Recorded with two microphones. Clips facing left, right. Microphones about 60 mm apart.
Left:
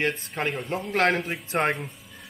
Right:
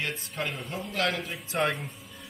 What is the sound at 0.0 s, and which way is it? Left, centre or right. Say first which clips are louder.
A man's voice: left 6 dB; left.